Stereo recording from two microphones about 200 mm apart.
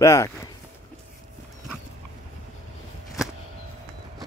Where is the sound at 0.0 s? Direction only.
15° left (ahead or behind).